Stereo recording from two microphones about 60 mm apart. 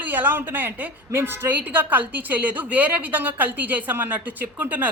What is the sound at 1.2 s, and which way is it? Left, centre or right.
Speech, right.